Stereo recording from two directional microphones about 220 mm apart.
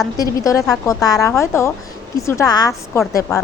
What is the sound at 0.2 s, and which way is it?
A woman's voice, 15° left (ahead or behind).